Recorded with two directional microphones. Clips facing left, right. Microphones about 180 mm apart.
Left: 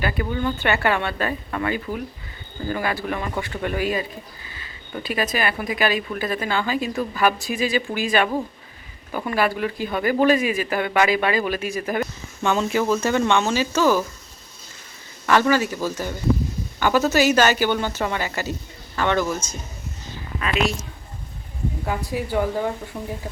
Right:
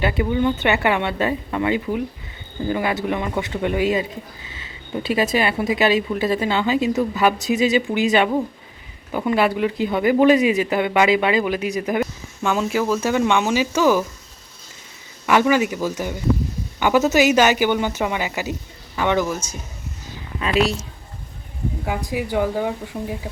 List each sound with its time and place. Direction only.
0.0 s speech: 20° right (ahead or behind)
12.4 s a woman's voice: 5° right (ahead or behind)
15.3 s a woman's voice: 15° right (ahead or behind)
20.4 s a woman's voice: 30° right (ahead or behind)
21.8 s a woman's voice: 10° right (ahead or behind)